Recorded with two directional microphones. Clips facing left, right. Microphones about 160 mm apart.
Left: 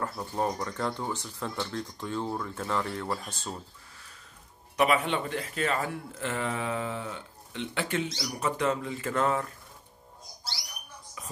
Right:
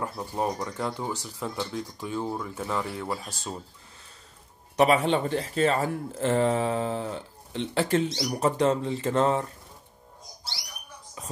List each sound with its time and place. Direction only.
0.0 s speech: 15° right (ahead or behind)
4.7 s speech: 35° right (ahead or behind)